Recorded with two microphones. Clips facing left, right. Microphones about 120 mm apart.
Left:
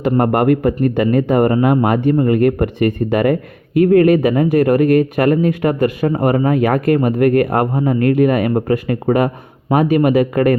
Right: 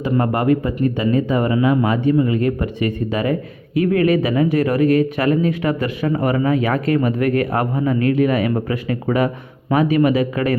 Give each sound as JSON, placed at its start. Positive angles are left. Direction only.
{"t": 0.0, "sound": "speech", "side_deg": 55}